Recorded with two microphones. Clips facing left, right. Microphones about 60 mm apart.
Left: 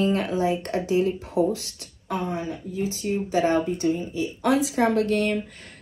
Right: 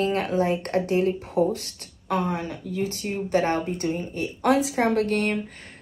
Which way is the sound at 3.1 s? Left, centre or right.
Right.